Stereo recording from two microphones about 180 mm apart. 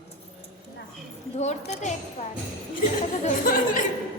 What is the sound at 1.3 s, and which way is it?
Speech, 40° left (ahead or behind).